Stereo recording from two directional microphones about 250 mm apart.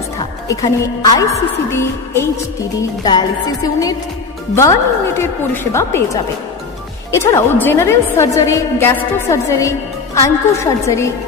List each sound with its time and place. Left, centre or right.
0.5 s a woman's voice: centre
7.2 s a woman's voice: centre